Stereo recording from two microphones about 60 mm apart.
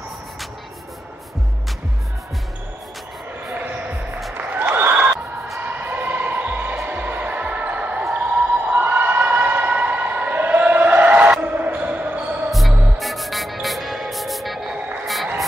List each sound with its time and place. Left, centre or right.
4.3 s a sound: right
5.6 s music: right
6.9 s basketball bounce: right
8.1 s a sound: right
11.4 s music: right
12.4 s music: centre